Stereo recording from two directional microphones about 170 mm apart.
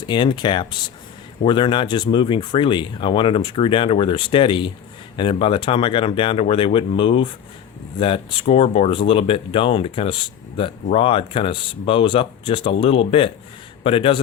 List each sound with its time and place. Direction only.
0.1 s speech: 25° left (ahead or behind)